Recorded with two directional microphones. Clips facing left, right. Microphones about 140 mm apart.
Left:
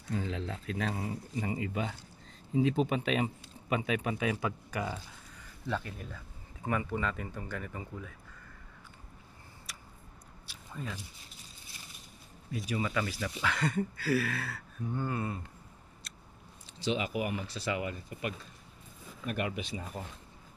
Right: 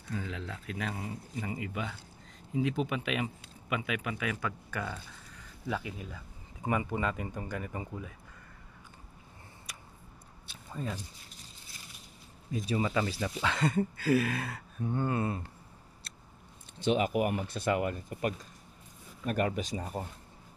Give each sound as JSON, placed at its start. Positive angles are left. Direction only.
{"t": 0.1, "sound": "speech", "side_deg": 30}
{"t": 5.7, "sound": "speech", "side_deg": -10}
{"t": 10.8, "sound": "speech", "side_deg": -35}
{"t": 12.6, "sound": "speech", "side_deg": -30}
{"t": 16.8, "sound": "speech", "side_deg": -50}